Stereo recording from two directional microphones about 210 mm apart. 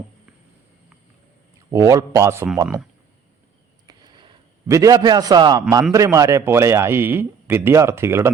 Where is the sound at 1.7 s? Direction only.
15° right (ahead or behind).